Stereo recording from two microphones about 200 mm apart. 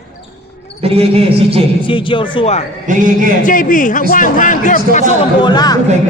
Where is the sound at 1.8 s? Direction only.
25° left (ahead or behind).